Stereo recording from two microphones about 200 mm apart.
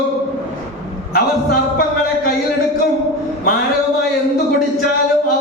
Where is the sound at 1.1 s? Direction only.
50° left (ahead or behind).